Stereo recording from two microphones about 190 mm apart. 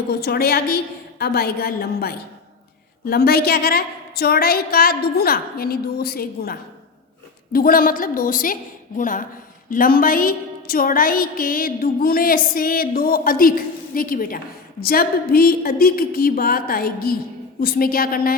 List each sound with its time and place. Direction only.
0.1 s a woman's voice: 55° left (ahead or behind)